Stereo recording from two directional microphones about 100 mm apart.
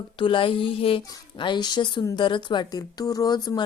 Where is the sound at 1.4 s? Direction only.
50° left (ahead or behind).